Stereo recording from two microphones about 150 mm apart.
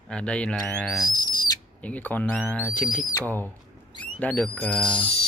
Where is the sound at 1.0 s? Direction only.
25° left (ahead or behind).